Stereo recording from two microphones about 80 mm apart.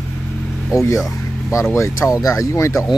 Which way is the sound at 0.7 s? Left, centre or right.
Left.